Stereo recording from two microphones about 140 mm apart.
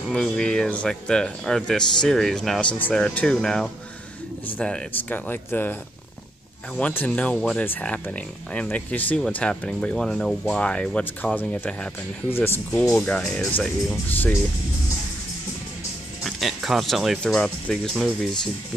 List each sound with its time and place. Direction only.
0.1 s speech: 5° left (ahead or behind)
6.8 s speech: 15° left (ahead or behind)
12.8 s speech: 5° left (ahead or behind)
16.3 s speech: centre (ahead or behind)